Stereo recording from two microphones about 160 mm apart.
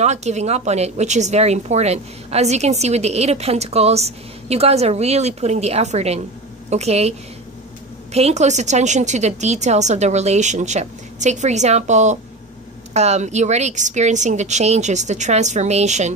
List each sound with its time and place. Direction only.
0.0 s a woman's voice: 45° right (ahead or behind)